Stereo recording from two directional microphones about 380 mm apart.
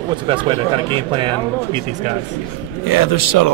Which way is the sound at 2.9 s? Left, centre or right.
Left.